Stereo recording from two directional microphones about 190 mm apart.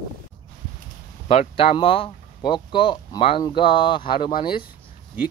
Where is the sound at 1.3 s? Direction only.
30° left (ahead or behind).